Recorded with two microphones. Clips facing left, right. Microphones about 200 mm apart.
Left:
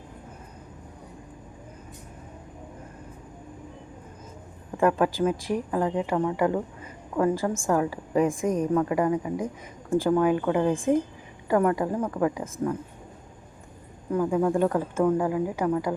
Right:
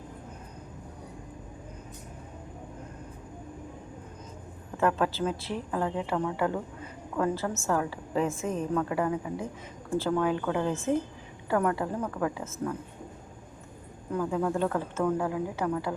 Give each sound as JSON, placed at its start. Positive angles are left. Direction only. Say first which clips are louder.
{"t": 4.8, "sound": "a woman's voice", "louder": "left 4 dB", "side_deg": 10}
{"t": 14.1, "sound": "a woman's voice", "louder": "left 5 dB", "side_deg": 10}